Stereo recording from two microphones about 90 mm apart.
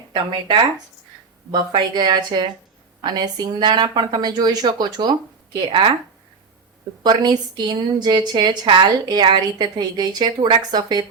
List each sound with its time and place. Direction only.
0.1 s a woman's voice: 60° right (ahead or behind)
7.0 s a woman's voice: 50° right (ahead or behind)